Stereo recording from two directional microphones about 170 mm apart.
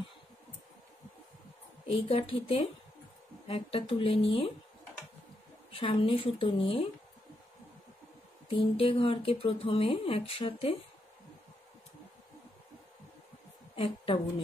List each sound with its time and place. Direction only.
1.9 s speech: 35° left (ahead or behind)
5.7 s speech: 35° left (ahead or behind)
8.5 s speech: 35° left (ahead or behind)
13.7 s a woman's voice: 35° left (ahead or behind)